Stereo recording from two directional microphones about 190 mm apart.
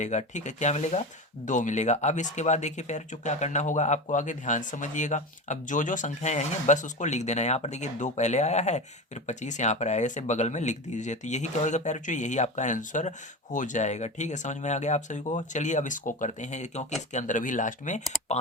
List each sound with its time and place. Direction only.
0.0 s speech: 40° left (ahead or behind)